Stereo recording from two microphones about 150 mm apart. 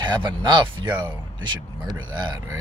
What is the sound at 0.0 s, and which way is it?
Speech, 30° right (ahead or behind).